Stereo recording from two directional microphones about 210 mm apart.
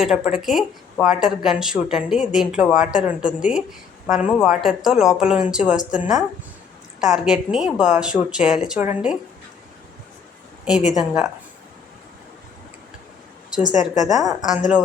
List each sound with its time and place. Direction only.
0.0 s speech: centre (ahead or behind)
10.7 s speech: 5° right (ahead or behind)
13.7 s a woman's voice: 35° left (ahead or behind)
14.1 s speech: centre (ahead or behind)